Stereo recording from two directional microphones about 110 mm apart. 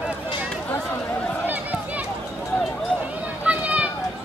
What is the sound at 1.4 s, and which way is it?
Run, 15° right (ahead or behind).